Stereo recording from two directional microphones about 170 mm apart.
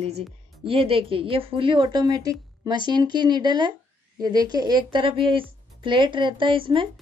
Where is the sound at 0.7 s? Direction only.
30° right (ahead or behind).